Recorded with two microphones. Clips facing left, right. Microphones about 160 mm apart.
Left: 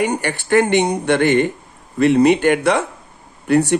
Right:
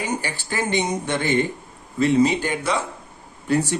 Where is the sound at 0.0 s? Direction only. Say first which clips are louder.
Left 7 dB; 65° left (ahead or behind).